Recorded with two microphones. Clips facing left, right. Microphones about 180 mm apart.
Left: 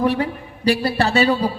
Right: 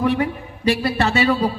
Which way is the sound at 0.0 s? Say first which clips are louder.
Even; 35° left (ahead or behind).